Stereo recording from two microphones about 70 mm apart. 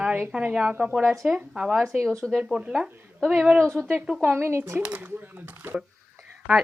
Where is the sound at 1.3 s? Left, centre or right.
Centre.